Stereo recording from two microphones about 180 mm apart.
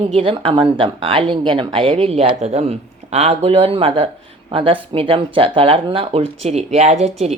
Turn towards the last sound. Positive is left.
turn(degrees=-35)  # may be behind; listen again after turning